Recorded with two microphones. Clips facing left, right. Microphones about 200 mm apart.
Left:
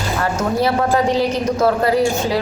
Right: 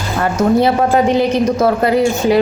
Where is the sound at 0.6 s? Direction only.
20° right (ahead or behind).